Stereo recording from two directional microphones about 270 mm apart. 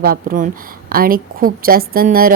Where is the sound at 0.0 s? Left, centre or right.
Right.